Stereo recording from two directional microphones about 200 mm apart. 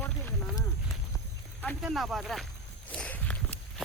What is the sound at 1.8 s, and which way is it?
Speech, centre (ahead or behind).